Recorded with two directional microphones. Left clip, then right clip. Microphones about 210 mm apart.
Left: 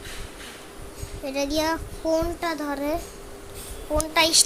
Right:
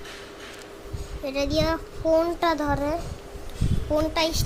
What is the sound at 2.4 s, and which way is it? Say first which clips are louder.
Speech: right 5 dB; 15° right (ahead or behind).